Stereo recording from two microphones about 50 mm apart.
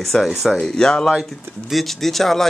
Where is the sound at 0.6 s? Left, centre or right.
Centre.